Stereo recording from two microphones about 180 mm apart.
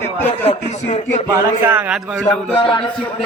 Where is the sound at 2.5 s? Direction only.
30° left (ahead or behind).